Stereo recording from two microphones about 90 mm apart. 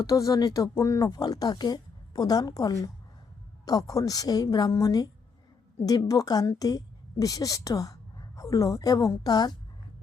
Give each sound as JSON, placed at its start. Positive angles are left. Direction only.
{"t": 0.0, "sound": "speech", "side_deg": 40}
{"t": 1.1, "sound": "a woman's voice", "side_deg": 45}
{"t": 6.1, "sound": "a woman's voice", "side_deg": 45}